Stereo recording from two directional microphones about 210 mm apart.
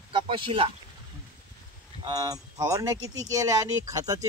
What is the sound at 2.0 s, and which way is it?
Speech, 20° right (ahead or behind).